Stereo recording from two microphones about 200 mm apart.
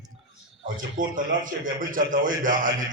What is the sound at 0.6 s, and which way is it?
A man's voice, 40° right (ahead or behind).